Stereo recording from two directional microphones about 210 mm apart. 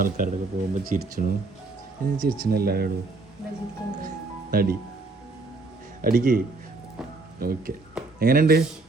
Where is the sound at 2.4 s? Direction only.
45° right (ahead or behind).